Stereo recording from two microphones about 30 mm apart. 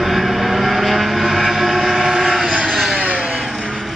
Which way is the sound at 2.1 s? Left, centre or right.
Centre.